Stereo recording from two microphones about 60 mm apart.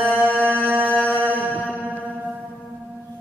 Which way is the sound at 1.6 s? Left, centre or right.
Right.